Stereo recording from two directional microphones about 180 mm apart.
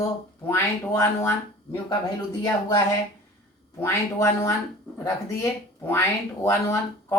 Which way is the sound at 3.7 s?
15° left (ahead or behind).